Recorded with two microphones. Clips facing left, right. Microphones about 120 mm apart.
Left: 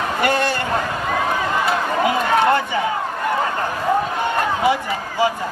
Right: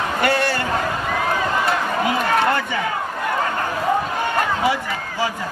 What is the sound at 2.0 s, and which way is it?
Run, 20° left (ahead or behind).